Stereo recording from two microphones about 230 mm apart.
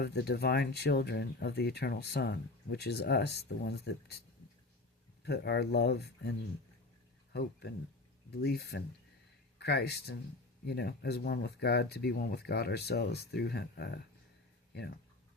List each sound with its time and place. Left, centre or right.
0.0 s speech: left
5.2 s speech: left
8.3 s speech: left